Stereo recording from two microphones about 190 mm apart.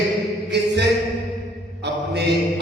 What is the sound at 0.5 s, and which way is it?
Chant, 65° right (ahead or behind).